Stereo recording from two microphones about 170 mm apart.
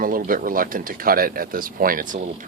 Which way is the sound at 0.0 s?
55° right (ahead or behind).